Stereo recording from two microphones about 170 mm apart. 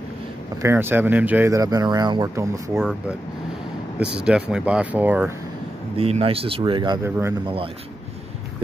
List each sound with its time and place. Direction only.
0.6 s speech: 15° right (ahead or behind)
2.8 s speech: 5° left (ahead or behind)
4.2 s speech: 5° right (ahead or behind)
5.9 s speech: 35° right (ahead or behind)